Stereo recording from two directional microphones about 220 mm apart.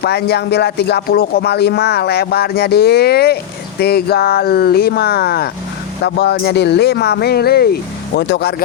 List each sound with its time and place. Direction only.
0.0 s speech: 50° left (ahead or behind)